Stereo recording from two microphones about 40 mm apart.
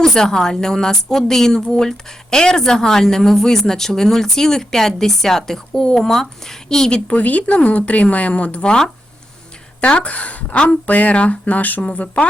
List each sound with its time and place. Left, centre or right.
0.0 s a woman's voice: centre
7.2 s speech: left
9.8 s speech: left